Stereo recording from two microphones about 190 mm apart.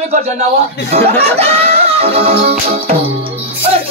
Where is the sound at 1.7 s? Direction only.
30° right (ahead or behind).